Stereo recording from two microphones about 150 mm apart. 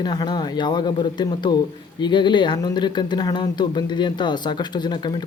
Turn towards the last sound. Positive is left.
turn(degrees=30)  # may be behind; listen again after turning